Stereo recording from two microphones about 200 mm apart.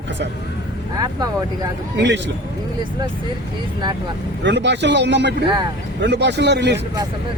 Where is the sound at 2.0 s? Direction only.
60° right (ahead or behind).